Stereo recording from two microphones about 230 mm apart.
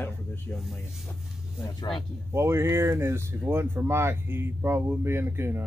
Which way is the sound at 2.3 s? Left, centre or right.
Centre.